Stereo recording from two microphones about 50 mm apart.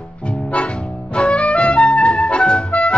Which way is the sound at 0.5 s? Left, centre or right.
Left.